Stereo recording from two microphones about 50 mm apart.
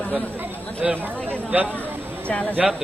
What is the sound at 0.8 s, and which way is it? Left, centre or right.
Speech, right.